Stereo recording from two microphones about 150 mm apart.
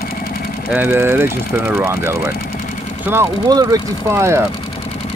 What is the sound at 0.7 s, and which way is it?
Speech, 15° right (ahead or behind).